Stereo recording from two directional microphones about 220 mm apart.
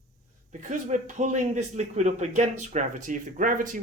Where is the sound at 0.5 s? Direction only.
35° right (ahead or behind).